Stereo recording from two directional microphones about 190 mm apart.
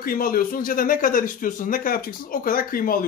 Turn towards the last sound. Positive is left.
turn(degrees=50)  # may be behind; listen again after turning